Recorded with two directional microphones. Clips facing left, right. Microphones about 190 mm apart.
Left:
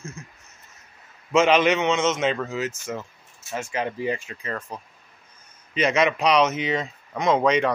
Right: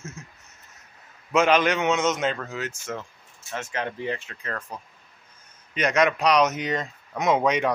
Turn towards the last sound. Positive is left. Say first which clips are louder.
# left 2 dB
turn(degrees=-5)  # may be behind; listen again after turning